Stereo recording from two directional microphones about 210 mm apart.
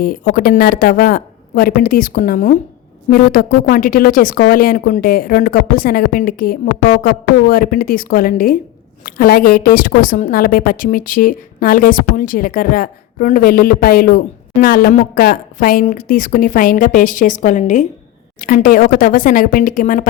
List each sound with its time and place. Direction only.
0.0 s a woman's voice: 45° left (ahead or behind)